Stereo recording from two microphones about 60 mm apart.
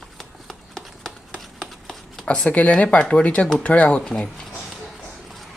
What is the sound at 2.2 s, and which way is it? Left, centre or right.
Speech, centre.